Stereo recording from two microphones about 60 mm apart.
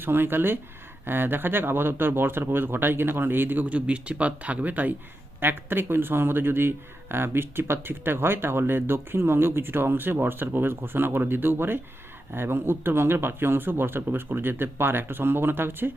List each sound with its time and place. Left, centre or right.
0.0 s a man's voice: right